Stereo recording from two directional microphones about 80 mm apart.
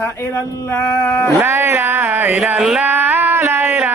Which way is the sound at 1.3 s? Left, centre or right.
Right.